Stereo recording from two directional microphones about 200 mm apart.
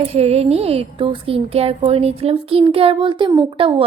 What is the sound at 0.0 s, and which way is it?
A woman's voice, 30° right (ahead or behind).